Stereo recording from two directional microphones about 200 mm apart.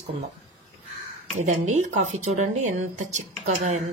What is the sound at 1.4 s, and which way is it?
A woman's voice, 35° right (ahead or behind).